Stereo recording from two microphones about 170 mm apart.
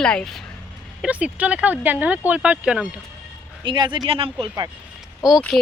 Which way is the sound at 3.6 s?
30° right (ahead or behind).